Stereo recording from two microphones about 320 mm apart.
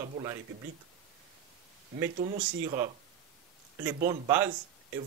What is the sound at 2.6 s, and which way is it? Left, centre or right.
Speech, centre.